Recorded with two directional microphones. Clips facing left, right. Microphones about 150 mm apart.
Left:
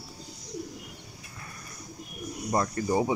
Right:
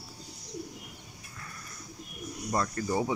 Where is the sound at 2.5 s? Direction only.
20° left (ahead or behind).